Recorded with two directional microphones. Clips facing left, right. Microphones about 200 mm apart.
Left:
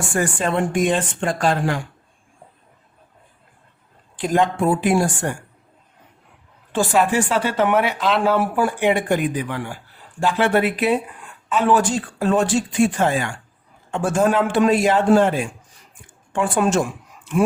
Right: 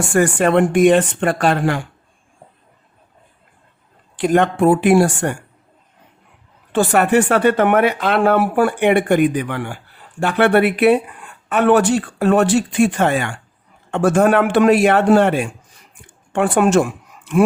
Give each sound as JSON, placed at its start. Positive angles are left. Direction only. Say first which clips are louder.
{"t": 0.1, "sound": "speech", "louder": "right 7 dB", "side_deg": -65}
{"t": 4.2, "sound": "speech", "louder": "right 4 dB", "side_deg": -65}
{"t": 6.7, "sound": "a man's voice", "louder": "right 4 dB", "side_deg": -65}